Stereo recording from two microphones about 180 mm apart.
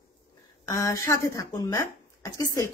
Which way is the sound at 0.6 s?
20° left (ahead or behind).